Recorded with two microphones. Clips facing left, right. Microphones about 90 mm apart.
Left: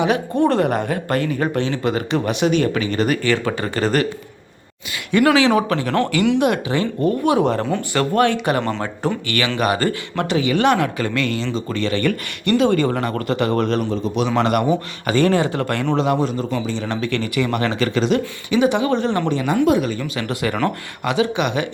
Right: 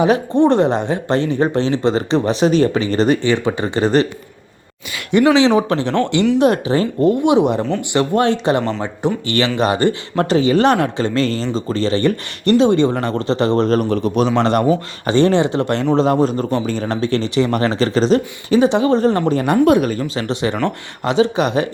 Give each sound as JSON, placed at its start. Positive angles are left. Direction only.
{"t": 0.0, "sound": "a man's voice", "side_deg": -35}
{"t": 0.4, "sound": "speech", "side_deg": -25}
{"t": 5.1, "sound": "a man's voice", "side_deg": -25}
{"t": 7.3, "sound": "a man's voice", "side_deg": -20}
{"t": 16.2, "sound": "a man's voice", "side_deg": -40}
{"t": 19.6, "sound": "speech", "side_deg": -50}
{"t": 20.0, "sound": "a man's voice", "side_deg": -30}